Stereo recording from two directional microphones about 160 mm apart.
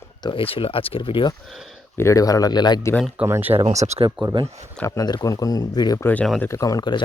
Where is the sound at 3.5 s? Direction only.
40° right (ahead or behind).